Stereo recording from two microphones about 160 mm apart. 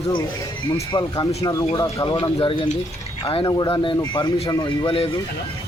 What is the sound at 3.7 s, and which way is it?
A man's voice, 30° left (ahead or behind).